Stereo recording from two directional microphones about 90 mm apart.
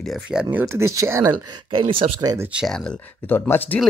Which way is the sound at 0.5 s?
25° right (ahead or behind).